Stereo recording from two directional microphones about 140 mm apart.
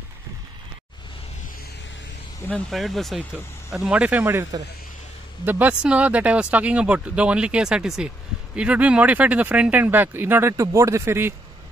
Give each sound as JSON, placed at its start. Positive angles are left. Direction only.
{"t": 2.7, "sound": "speech", "side_deg": 0}